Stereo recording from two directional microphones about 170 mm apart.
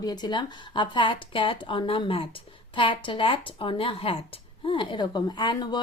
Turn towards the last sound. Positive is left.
turn(degrees=25)  # may be behind; listen again after turning